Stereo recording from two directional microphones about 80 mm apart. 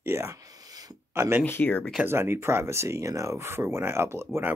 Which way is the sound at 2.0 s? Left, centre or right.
Right.